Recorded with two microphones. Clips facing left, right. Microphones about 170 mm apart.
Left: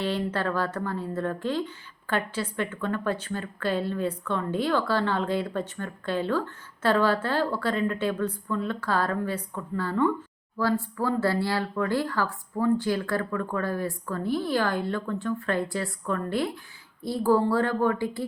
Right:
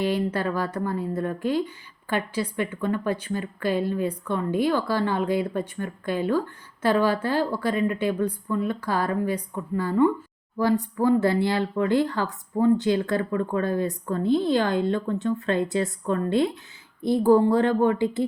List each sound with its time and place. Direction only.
0.0 s a woman's voice: 10° right (ahead or behind)